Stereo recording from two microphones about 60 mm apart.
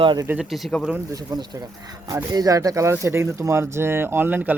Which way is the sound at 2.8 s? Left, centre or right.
Right.